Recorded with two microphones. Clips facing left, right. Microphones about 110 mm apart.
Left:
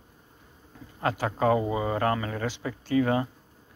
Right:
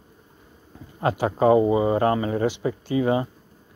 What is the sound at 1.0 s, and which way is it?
Speech, 20° right (ahead or behind).